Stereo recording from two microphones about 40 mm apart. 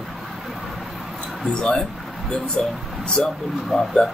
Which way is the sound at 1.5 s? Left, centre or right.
Centre.